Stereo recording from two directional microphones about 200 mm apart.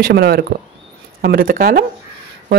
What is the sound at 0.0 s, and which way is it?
Speech, 50° right (ahead or behind).